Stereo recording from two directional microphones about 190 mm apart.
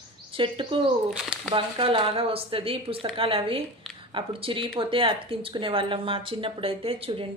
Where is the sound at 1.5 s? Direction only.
25° right (ahead or behind).